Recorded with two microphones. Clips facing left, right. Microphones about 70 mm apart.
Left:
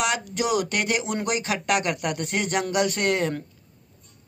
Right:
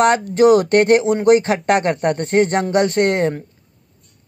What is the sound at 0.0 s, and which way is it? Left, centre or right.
Speech, right.